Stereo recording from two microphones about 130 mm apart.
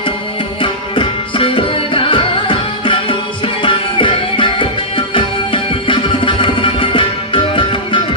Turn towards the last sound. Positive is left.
turn(degrees=40)  # may be behind; listen again after turning